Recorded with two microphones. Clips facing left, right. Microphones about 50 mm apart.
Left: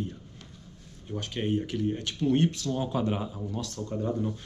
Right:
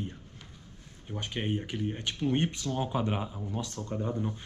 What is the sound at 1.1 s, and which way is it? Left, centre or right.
Speech, centre.